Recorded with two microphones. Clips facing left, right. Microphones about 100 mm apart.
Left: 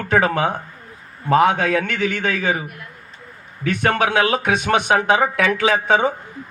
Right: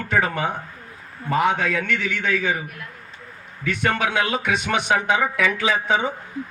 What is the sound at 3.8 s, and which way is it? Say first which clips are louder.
Speech: left 4 dB; 55° left (ahead or behind).